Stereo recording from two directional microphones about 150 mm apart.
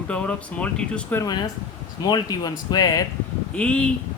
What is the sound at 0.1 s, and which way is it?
Speech, 10° left (ahead or behind).